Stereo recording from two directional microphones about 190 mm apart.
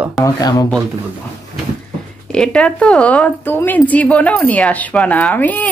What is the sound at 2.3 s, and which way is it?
A woman's voice, 5° left (ahead or behind).